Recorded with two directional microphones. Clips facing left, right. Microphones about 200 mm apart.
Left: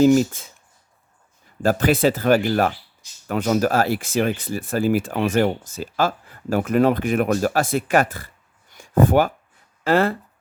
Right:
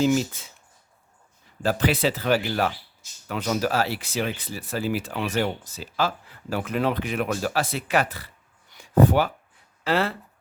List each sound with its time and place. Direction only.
0.0 s speech: 50° left (ahead or behind)
1.6 s speech: 50° left (ahead or behind)
8.7 s a sound: 50° left (ahead or behind)
9.8 s speech: 50° left (ahead or behind)